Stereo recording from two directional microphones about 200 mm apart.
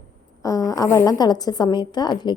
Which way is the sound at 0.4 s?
15° left (ahead or behind).